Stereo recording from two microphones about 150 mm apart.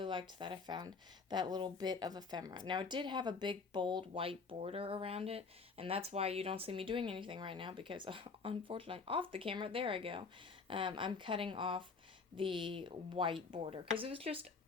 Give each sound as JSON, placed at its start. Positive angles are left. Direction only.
{"t": 0.0, "sound": "speech", "side_deg": -30}